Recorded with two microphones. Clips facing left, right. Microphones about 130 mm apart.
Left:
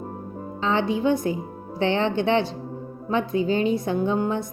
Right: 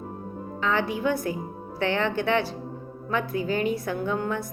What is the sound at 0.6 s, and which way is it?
A woman's voice, 25° left (ahead or behind).